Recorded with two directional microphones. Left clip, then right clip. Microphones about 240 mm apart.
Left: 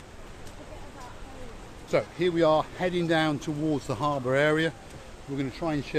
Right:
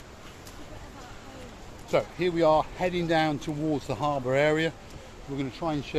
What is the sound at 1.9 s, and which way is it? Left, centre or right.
Speech, centre.